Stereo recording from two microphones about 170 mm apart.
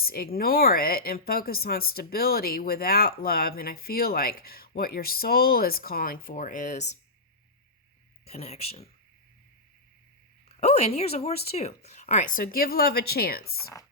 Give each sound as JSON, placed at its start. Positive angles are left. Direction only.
{"t": 0.0, "sound": "speech", "side_deg": 60}
{"t": 8.3, "sound": "speech", "side_deg": 40}
{"t": 10.6, "sound": "speech", "side_deg": 40}